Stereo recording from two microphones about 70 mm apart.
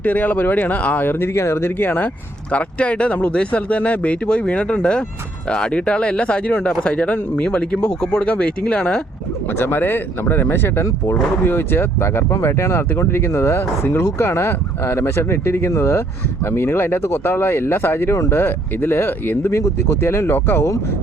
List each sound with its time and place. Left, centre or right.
0.0 s speech: left
2.5 s speech: centre
9.5 s speech: left